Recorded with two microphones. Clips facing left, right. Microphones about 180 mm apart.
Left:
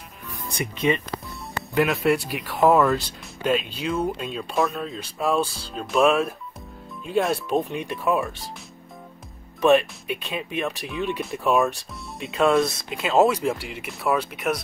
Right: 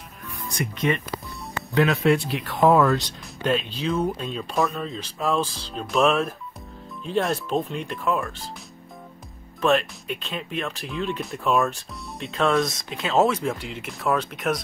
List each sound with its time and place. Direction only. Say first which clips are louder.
0.5 s speech: left 1 dB; 25° left (ahead or behind)
1.7 s speech: right 1 dB; centre (ahead or behind)
7.7 s speech: left 2 dB; 15° left (ahead or behind)
9.6 s speech: left 4 dB; 15° left (ahead or behind)